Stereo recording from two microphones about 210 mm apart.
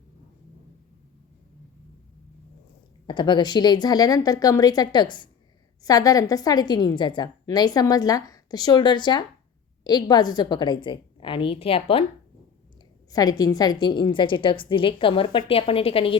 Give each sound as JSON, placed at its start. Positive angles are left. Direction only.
{"t": 3.1, "sound": "a woman's voice", "side_deg": 20}
{"t": 13.1, "sound": "a woman's voice", "side_deg": 20}